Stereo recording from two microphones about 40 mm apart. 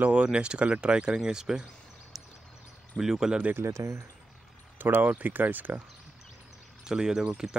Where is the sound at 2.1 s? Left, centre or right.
Centre.